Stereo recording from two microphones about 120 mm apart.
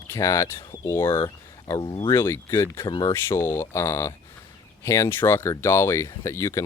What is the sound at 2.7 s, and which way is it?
Speech, 40° left (ahead or behind).